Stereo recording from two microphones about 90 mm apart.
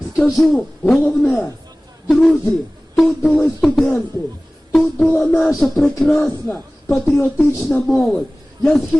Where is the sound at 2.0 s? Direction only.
5° left (ahead or behind).